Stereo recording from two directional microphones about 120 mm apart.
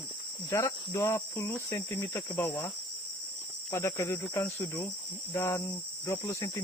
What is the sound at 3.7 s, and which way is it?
Cricket, 20° left (ahead or behind).